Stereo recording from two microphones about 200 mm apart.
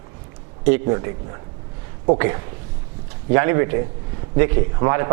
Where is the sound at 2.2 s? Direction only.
20° right (ahead or behind).